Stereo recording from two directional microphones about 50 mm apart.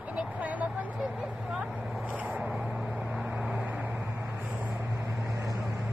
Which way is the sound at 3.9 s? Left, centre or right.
Right.